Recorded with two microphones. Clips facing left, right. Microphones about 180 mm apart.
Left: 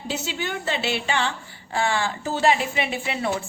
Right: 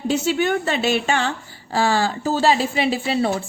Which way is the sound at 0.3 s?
50° right (ahead or behind).